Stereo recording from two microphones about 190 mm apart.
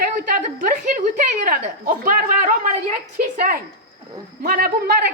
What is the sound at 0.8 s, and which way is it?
Speech, 45° right (ahead or behind).